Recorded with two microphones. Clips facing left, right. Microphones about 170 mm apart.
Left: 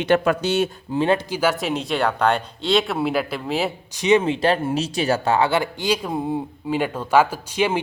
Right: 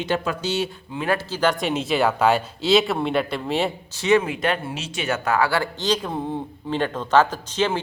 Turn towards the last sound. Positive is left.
turn(degrees=10)  # may be behind; listen again after turning